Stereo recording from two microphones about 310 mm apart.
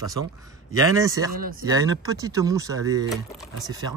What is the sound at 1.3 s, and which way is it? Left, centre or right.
Speech, right.